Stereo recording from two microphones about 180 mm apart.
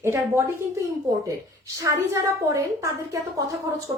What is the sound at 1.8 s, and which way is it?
A woman's voice, 15° right (ahead or behind).